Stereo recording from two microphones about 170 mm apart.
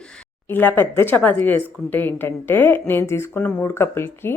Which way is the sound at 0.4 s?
10° left (ahead or behind).